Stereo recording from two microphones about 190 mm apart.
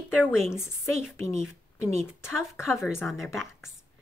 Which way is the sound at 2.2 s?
10° left (ahead or behind).